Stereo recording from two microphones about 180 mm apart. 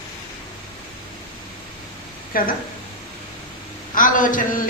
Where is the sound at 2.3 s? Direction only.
50° left (ahead or behind).